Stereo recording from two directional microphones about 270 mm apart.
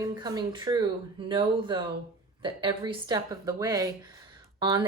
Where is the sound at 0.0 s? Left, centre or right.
Centre.